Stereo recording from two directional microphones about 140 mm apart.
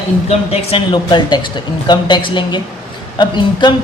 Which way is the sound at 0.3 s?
40° left (ahead or behind).